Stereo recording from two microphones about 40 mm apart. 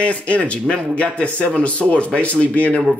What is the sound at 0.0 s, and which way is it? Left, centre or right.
Speech, left.